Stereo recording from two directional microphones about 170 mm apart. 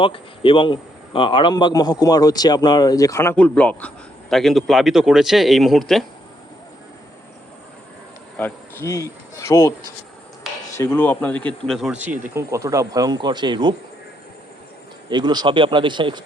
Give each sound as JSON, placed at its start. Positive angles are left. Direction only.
{"t": 0.0, "sound": "a man's voice", "side_deg": 30}
{"t": 8.4, "sound": "speech", "side_deg": 10}
{"t": 10.8, "sound": "a man's voice", "side_deg": 10}
{"t": 11.7, "sound": "speech", "side_deg": -5}
{"t": 15.1, "sound": "speech", "side_deg": -25}